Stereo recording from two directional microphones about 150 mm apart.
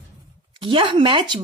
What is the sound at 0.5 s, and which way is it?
Speech, 35° right (ahead or behind).